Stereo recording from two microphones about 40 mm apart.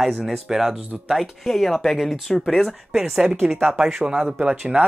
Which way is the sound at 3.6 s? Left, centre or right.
Right.